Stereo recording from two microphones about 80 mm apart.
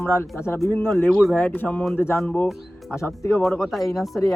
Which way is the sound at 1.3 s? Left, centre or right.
Left.